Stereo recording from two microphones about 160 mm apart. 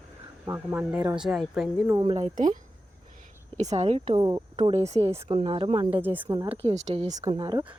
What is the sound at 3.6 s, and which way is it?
Speech, 45° right (ahead or behind).